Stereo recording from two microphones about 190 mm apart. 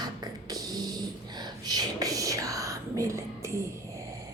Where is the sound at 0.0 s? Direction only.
20° right (ahead or behind).